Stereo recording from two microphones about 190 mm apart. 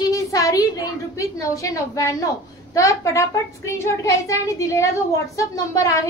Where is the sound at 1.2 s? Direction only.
15° left (ahead or behind).